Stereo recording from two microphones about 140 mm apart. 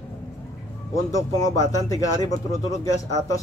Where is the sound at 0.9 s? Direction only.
25° left (ahead or behind).